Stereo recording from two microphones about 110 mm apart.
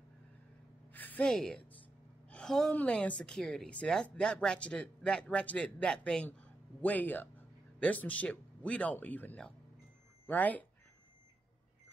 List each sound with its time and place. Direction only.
0.9 s a woman's voice: 15° left (ahead or behind)
2.2 s a sound: 5° left (ahead or behind)
2.7 s speech: 10° left (ahead or behind)